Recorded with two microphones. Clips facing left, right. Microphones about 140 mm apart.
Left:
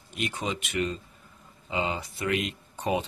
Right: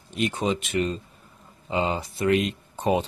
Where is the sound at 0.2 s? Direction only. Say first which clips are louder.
Right 6 dB; 30° right (ahead or behind).